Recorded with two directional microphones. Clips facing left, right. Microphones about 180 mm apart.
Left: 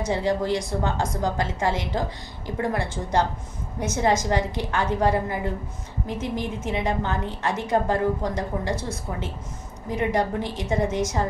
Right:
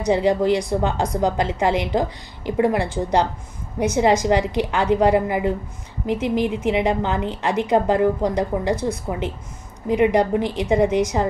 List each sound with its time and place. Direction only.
0.0 s a woman's voice: 15° right (ahead or behind)
9.8 s a woman's voice: 15° right (ahead or behind)